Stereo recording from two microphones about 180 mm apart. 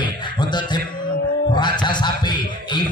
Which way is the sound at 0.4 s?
25° left (ahead or behind).